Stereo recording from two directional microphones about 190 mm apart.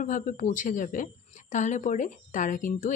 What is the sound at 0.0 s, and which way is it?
A woman's voice, 45° left (ahead or behind).